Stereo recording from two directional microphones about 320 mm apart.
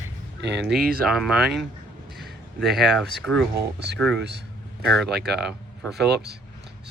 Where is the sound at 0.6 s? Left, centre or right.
Centre.